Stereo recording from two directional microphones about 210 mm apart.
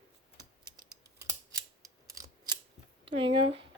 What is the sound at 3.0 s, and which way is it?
Speech, 25° right (ahead or behind).